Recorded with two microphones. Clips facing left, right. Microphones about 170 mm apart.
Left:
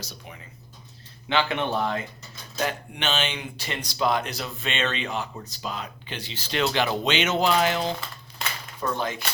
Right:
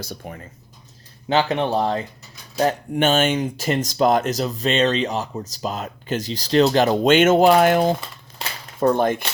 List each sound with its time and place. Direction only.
0.0 s speech: 50° right (ahead or behind)
1.3 s speech: 40° right (ahead or behind)